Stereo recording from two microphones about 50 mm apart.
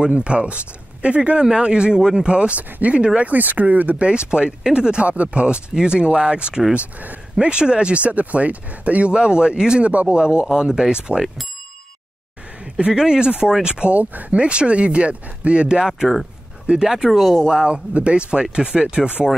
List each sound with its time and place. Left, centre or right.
0.0 s speech: right
4.0 s speech: centre
12.7 s speech: centre
17.5 s speech: centre